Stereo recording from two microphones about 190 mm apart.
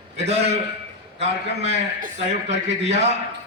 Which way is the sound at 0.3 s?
35° right (ahead or behind).